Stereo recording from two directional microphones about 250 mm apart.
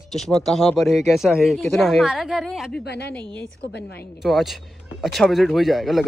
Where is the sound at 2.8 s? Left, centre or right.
Left.